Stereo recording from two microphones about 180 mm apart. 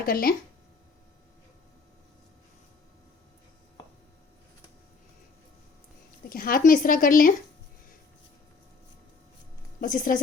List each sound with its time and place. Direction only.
0.0 s speech: 55° left (ahead or behind)
6.2 s speech: 55° left (ahead or behind)
9.8 s speech: 50° left (ahead or behind)